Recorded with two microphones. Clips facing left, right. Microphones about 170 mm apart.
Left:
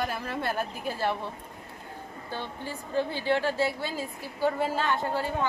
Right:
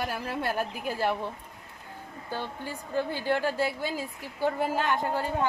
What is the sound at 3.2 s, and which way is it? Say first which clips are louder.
Speech: left 1 dB; 45° right (ahead or behind).